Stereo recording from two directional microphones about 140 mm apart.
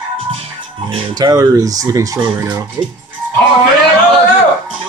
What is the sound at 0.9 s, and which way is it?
Speech, 35° right (ahead or behind).